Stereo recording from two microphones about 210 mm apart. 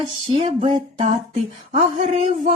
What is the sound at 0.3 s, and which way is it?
Speech, 30° right (ahead or behind).